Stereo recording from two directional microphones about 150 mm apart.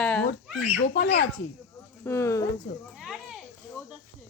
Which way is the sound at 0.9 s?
90° left.